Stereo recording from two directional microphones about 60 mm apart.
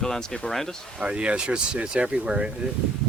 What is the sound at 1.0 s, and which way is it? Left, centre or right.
Speech, centre.